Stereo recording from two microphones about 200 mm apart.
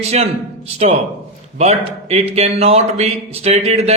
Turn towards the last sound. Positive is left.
turn(degrees=-30)  # may be behind; listen again after turning